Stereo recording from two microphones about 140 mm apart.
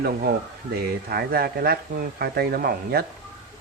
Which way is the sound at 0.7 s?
90° right.